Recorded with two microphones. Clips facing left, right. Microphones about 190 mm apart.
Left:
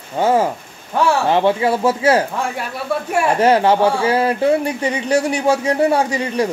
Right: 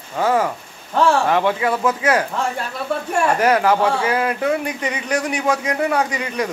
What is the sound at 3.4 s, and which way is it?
Speech, 30° left (ahead or behind).